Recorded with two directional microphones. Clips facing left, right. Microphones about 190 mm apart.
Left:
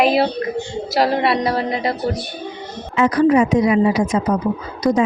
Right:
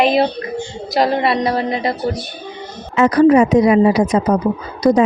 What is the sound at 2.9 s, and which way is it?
A woman's voice, 40° right (ahead or behind).